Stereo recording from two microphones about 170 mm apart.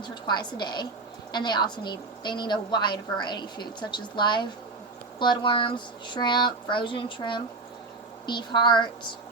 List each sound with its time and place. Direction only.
0.0 s a woman's voice: 25° left (ahead or behind)